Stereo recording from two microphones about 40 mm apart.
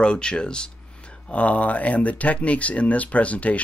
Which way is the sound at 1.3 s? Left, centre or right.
Left.